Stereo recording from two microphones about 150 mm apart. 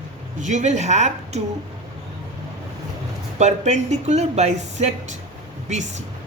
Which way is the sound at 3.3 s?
50° right (ahead or behind).